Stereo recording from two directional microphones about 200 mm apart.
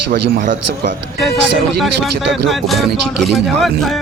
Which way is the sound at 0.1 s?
40° right (ahead or behind).